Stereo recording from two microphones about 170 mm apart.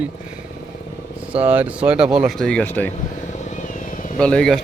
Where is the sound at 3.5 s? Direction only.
50° left (ahead or behind).